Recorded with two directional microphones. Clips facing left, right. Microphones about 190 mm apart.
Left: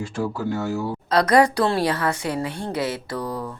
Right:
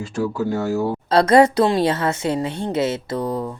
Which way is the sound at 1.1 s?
25° right (ahead or behind).